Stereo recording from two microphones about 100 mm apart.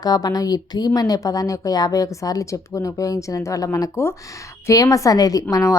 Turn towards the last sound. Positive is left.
turn(degrees=30)  # may be behind; listen again after turning